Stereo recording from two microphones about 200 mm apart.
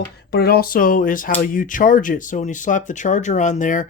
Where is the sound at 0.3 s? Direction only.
50° left (ahead or behind).